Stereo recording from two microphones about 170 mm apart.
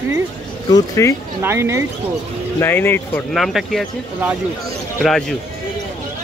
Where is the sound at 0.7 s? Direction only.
20° left (ahead or behind).